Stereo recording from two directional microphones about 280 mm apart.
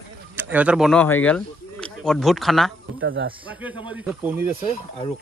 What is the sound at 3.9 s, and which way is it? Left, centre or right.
Speech, centre.